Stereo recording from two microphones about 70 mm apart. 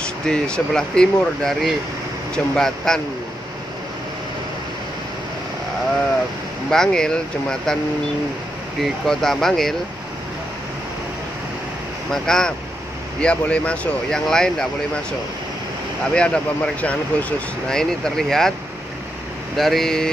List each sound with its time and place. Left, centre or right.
0.3 s speech: centre
6.7 s speech: centre
8.8 s speech: centre
12.1 s speech: centre
16.2 s speech: centre
19.5 s speech: centre